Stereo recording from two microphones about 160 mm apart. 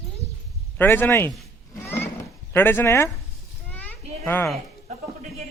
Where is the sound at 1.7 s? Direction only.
15° left (ahead or behind).